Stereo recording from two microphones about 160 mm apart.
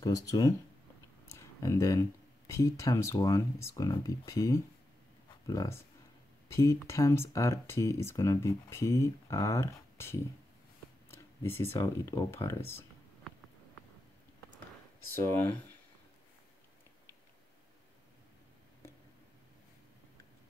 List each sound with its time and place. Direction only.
0.0 s speech: 20° left (ahead or behind)